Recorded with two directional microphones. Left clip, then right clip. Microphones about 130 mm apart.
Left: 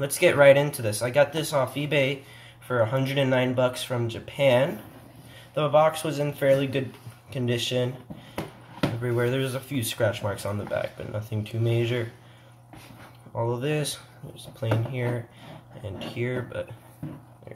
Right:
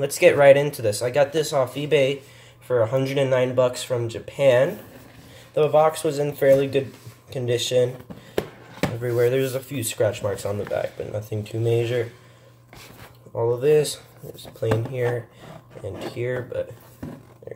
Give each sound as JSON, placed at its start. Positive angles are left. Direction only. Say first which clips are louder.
{"t": 0.0, "sound": "speech", "louder": "right 3 dB", "side_deg": -40}
{"t": 9.0, "sound": "speech", "louder": "right 7 dB", "side_deg": -40}
{"t": 13.4, "sound": "speech", "louder": "right 9 dB", "side_deg": -40}